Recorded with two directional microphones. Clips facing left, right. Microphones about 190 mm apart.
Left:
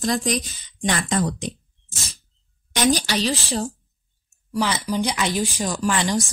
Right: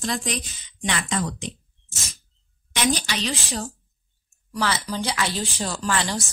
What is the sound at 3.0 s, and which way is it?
Speech, 35° left (ahead or behind).